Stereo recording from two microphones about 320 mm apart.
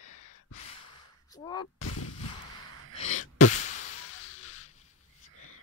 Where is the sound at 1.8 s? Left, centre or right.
Left.